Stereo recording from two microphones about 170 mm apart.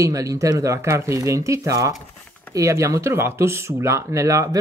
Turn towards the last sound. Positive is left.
turn(degrees=-20)  # may be behind; listen again after turning